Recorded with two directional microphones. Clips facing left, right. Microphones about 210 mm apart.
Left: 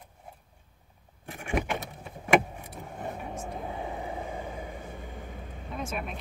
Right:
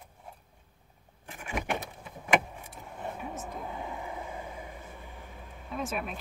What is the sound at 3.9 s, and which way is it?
Vehicle, 25° left (ahead or behind).